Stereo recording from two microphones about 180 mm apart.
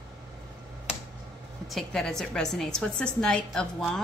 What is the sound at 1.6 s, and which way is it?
A woman's voice, centre (ahead or behind).